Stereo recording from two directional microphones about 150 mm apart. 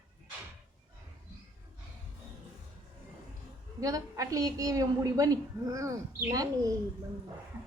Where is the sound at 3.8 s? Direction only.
20° right (ahead or behind).